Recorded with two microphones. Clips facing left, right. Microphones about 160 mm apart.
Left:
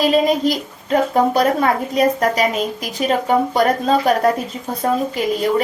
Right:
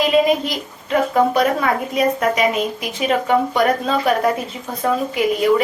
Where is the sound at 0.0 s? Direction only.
35° left (ahead or behind).